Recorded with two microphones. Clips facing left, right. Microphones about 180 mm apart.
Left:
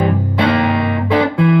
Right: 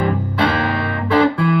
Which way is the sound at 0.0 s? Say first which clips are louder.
Left 3 dB; 15° left (ahead or behind).